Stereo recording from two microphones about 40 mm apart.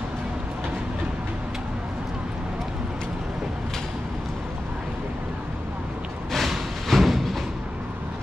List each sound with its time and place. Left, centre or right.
6.3 s music: centre